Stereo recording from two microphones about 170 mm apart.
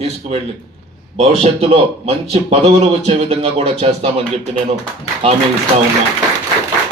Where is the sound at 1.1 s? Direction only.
35° right (ahead or behind).